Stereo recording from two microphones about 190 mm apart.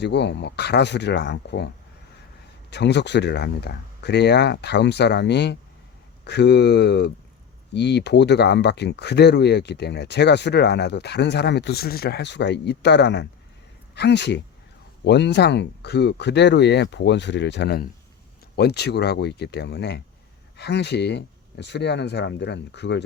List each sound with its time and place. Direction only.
0.0 s speech: 65° left (ahead or behind)